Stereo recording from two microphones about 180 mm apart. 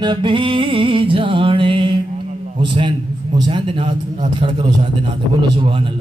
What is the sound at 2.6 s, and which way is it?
Speech, 25° right (ahead or behind).